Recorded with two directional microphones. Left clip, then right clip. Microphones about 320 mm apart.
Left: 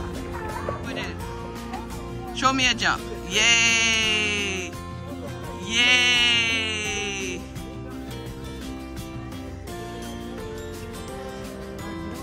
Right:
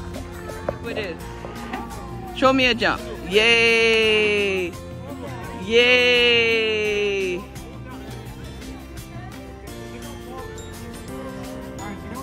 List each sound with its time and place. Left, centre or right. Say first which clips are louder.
0.8 s music: right 4 dB; centre
2.3 s speech: right 4 dB; centre
5.9 s music: even; centre